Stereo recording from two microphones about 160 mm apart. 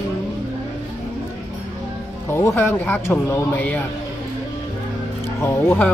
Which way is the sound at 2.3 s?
15° left (ahead or behind).